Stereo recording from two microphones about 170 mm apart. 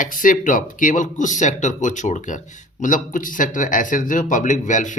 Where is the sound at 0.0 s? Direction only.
50° left (ahead or behind).